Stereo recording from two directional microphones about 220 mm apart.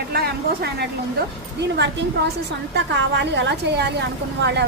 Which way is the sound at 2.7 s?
50° right (ahead or behind).